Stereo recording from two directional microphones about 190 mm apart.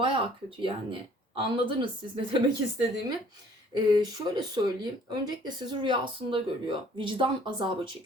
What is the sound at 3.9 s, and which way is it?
Speech, 25° right (ahead or behind).